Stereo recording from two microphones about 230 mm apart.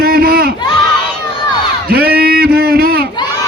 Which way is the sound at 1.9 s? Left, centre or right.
Right.